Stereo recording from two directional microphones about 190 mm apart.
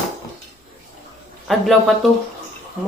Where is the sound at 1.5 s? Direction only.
Centre (ahead or behind).